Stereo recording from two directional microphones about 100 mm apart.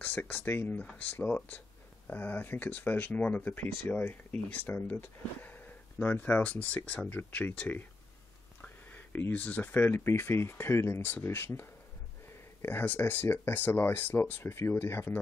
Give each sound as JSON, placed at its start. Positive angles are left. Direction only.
{"t": 0.0, "sound": "speech", "side_deg": 20}
{"t": 12.6, "sound": "speech", "side_deg": 20}